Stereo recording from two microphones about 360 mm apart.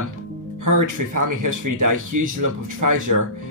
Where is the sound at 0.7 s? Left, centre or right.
Right.